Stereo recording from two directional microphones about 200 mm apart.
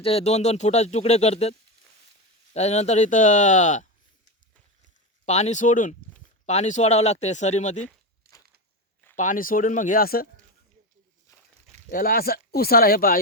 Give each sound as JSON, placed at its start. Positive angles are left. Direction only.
{"t": 0.0, "sound": "speech", "side_deg": 30}
{"t": 5.2, "sound": "speech", "side_deg": 35}
{"t": 9.1, "sound": "speech", "side_deg": 40}
{"t": 11.9, "sound": "speech", "side_deg": 45}